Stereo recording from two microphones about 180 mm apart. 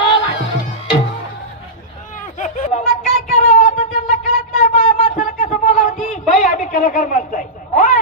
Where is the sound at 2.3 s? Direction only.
45° left (ahead or behind).